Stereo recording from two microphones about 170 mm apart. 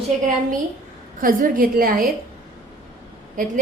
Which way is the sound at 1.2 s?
55° right (ahead or behind).